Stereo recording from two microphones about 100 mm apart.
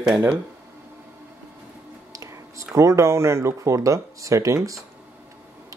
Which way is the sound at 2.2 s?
30° right (ahead or behind).